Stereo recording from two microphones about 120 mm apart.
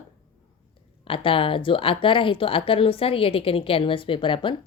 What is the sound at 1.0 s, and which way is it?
A woman's voice, 50° left (ahead or behind).